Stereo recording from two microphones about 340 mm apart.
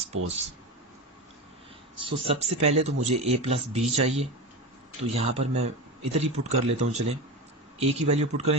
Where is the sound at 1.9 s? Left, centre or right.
Centre.